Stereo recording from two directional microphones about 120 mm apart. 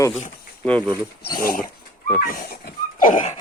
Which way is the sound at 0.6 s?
10° left (ahead or behind).